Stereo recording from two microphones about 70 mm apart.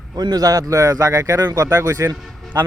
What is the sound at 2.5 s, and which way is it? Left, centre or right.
Speech, right.